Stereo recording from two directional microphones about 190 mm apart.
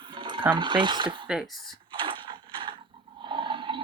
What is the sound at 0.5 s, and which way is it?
Speech, 25° right (ahead or behind).